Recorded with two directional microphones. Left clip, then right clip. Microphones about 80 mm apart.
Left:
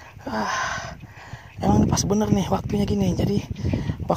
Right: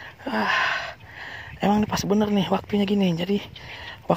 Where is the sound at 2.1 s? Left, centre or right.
Left.